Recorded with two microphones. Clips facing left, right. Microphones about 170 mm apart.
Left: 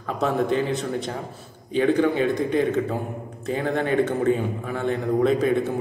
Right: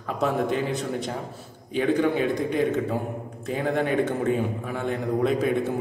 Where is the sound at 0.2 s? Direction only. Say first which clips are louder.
Left 2 dB; 10° right (ahead or behind).